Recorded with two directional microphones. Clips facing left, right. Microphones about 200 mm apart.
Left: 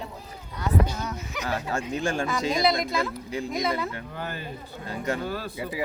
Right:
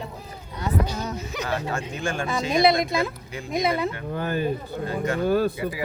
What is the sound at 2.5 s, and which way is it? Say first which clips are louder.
Speech: right 6 dB; 25° right (ahead or behind).